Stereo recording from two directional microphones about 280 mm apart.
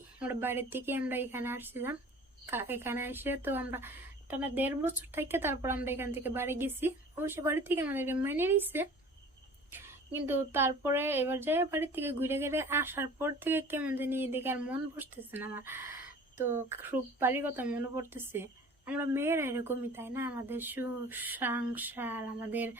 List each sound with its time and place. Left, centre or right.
0.2 s speech: centre